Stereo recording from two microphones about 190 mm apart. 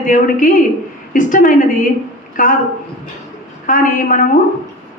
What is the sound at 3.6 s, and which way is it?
Speech, 45° left (ahead or behind).